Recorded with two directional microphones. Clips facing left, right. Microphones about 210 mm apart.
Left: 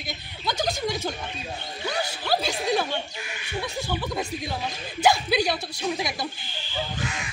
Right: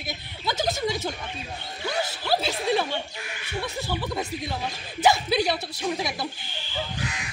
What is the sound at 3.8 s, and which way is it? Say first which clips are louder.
Speech: left 1 dB; centre (ahead or behind).